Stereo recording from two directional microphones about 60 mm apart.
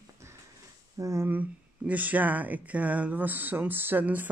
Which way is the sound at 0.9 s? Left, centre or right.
Right.